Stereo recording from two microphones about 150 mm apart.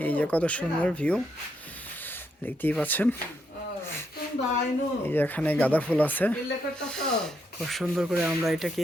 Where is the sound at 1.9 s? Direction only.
10° left (ahead or behind).